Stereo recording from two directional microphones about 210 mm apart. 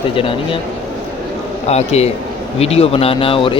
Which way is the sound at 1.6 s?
30° left (ahead or behind).